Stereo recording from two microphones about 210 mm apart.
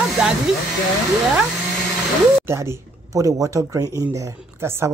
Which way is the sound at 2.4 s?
10° right (ahead or behind).